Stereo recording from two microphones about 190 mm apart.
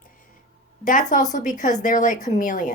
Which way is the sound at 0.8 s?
45° left (ahead or behind).